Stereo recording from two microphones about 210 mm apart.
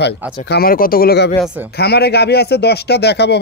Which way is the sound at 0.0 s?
50° left (ahead or behind).